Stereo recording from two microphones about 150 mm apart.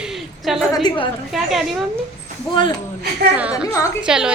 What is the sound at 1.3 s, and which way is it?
Speech, centre (ahead or behind).